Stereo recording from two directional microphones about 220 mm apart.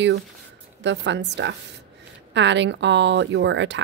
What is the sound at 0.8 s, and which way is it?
Speech, 55° right (ahead or behind).